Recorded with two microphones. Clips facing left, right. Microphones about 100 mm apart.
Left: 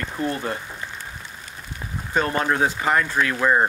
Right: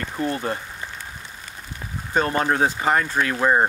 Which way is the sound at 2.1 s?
30° right (ahead or behind).